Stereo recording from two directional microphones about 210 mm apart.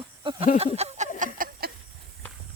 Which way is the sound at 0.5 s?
30° right (ahead or behind).